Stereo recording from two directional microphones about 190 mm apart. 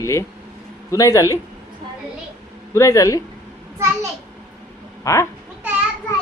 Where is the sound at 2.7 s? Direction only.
15° left (ahead or behind).